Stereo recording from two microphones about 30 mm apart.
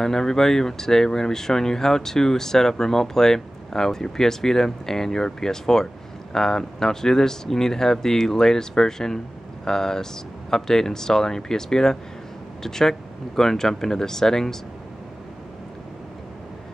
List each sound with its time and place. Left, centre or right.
0.0 s speech: centre